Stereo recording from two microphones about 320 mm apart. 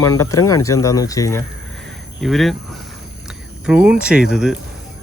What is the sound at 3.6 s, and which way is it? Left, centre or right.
Speech, centre.